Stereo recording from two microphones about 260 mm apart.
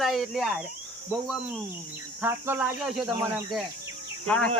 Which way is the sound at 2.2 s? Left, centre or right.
Centre.